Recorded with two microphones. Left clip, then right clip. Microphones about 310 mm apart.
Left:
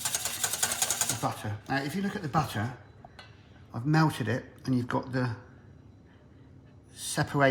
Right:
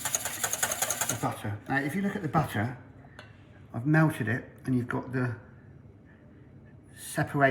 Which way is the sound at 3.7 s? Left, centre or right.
Centre.